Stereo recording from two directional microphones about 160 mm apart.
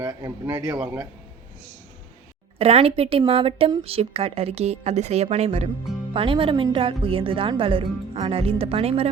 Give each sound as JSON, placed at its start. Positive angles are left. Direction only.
{"t": 0.1, "sound": "speech", "side_deg": -20}
{"t": 2.6, "sound": "speech", "side_deg": -40}